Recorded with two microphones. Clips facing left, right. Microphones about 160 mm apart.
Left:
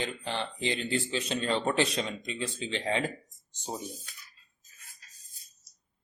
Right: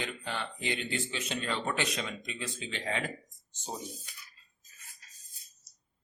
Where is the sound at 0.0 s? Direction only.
30° left (ahead or behind).